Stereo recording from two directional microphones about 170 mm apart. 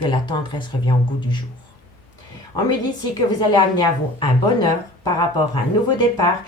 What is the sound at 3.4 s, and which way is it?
A woman's voice, 25° left (ahead or behind).